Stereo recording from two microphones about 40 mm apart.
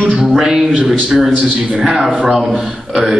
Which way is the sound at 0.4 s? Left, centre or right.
Centre.